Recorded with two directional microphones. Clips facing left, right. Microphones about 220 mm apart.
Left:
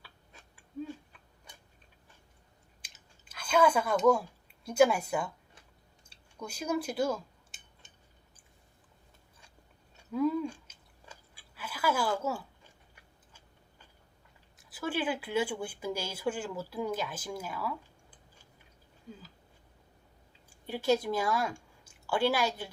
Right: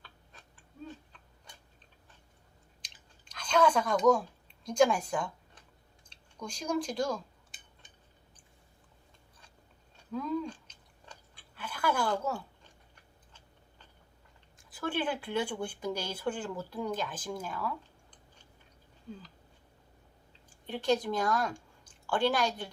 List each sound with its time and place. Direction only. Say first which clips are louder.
0.0 s cat: even; 10° left (ahead or behind)
3.2 s a sound: left 1 dB; 5° left (ahead or behind)
4.6 s speech: left 1 dB; 5° left (ahead or behind)
10.0 s chewing: left 4 dB; 10° left (ahead or behind)
14.6 s speech: even; 5° left (ahead or behind)
20.7 s a woman's voice: left 1 dB; 5° left (ahead or behind)